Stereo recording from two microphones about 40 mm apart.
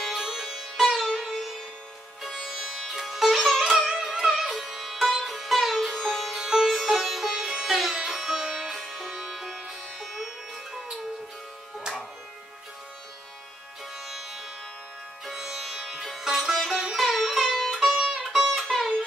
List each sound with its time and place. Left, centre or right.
0.0 s music: centre
2.9 s sitar: centre
6.5 s sitar: centre
7.9 s music: centre
13.9 s music: centre
16.3 s sitar: centre
16.9 s music: centre
17.7 s music: right
18.1 s music: centre